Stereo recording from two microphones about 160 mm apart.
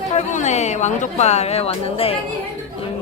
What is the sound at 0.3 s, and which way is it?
A woman's voice, 50° left (ahead or behind).